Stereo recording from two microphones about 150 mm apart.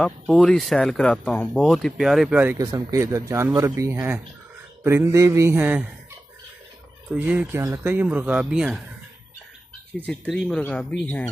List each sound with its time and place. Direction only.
0.0 s speech: 5° left (ahead or behind); by 2.6 s 10° right (ahead or behind)
2.6 s speech: 25° right (ahead or behind)
7.1 s speech: 10° right (ahead or behind)
9.9 s speech: 10° left (ahead or behind)